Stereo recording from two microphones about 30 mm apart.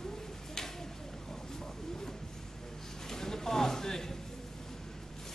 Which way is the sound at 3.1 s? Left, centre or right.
Centre.